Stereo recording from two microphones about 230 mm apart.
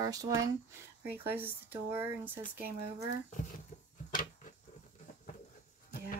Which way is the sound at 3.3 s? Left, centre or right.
Left.